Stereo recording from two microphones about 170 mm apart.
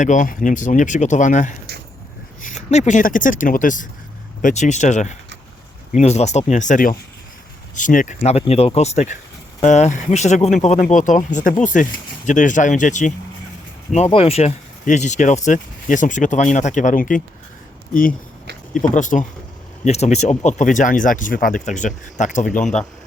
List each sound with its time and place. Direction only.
0.0 s speech: 50° left (ahead or behind)
18.7 s speech: 50° left (ahead or behind)